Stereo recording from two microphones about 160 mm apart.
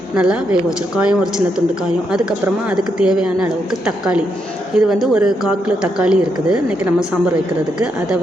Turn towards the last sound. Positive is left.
turn(degrees=-5)  # may be behind; listen again after turning